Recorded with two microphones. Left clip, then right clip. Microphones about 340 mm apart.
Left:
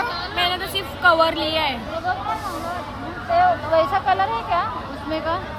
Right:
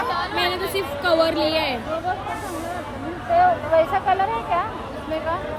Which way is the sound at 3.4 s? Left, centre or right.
Left.